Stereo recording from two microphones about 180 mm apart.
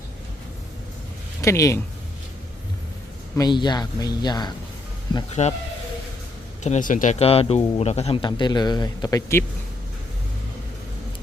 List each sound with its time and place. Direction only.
1.4 s speech: 15° left (ahead or behind)
3.3 s speech: 25° left (ahead or behind)
5.3 s speech: 40° left (ahead or behind)
6.6 s speech: 40° left (ahead or behind); by 9.4 s 20° left (ahead or behind)